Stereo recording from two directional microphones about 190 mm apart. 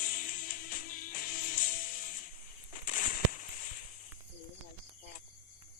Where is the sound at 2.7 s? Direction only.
45° left (ahead or behind).